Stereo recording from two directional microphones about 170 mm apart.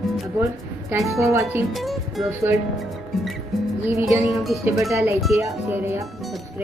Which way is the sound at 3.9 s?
15° right (ahead or behind).